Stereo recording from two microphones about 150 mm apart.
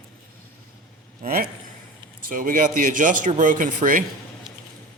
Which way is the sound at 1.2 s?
75° right (ahead or behind).